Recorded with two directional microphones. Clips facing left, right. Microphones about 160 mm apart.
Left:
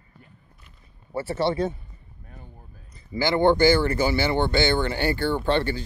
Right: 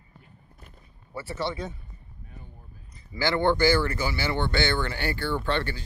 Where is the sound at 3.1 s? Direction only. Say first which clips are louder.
Left 4 dB; 15° left (ahead or behind).